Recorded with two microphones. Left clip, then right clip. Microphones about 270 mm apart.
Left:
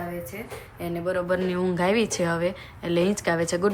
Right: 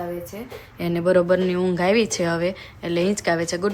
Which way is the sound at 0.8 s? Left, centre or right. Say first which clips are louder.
Right 8 dB; right.